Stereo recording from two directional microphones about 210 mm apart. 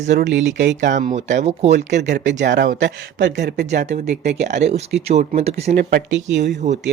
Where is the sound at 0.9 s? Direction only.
35° right (ahead or behind).